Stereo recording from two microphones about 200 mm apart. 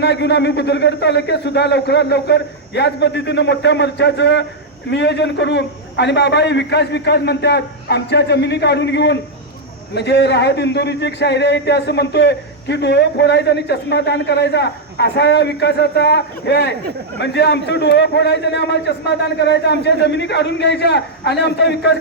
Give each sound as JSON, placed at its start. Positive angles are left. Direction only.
{"t": 0.0, "sound": "a man's voice", "side_deg": 60}